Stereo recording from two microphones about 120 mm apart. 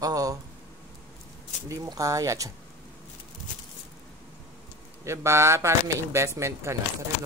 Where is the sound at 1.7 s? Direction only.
30° right (ahead or behind).